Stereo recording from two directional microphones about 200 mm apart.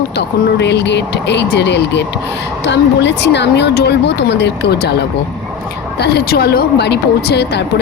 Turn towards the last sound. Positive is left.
turn(degrees=60)  # may be behind; listen again after turning